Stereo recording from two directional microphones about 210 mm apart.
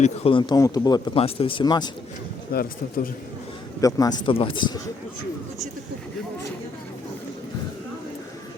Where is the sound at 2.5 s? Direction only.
45° left (ahead or behind).